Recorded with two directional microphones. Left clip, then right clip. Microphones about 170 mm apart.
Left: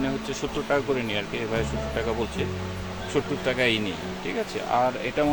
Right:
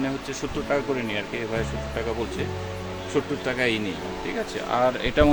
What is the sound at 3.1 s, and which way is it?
Speech, centre (ahead or behind).